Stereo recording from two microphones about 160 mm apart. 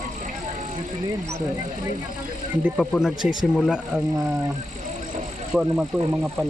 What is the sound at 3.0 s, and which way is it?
Speech, centre (ahead or behind).